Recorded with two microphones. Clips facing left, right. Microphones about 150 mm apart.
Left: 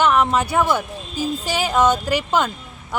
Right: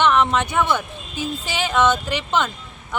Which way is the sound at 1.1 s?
40° left (ahead or behind).